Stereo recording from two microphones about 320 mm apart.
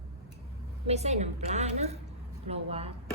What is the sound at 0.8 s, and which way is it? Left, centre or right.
A woman's voice, centre.